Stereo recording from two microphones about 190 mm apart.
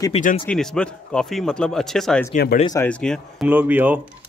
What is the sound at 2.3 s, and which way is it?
Speech, 50° left (ahead or behind).